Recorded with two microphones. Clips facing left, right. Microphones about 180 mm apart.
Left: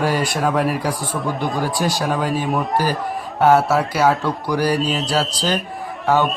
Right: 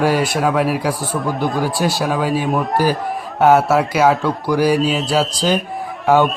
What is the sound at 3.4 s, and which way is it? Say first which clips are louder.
Speech: right 2 dB; 10° right (ahead or behind).